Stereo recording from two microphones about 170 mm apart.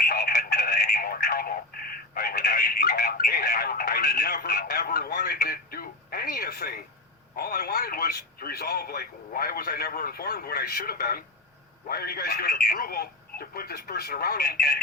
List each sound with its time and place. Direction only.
0.0 s a sound: 65° left (ahead or behind)
2.1 s telephone: 65° left (ahead or behind)
7.3 s speech: 65° left (ahead or behind)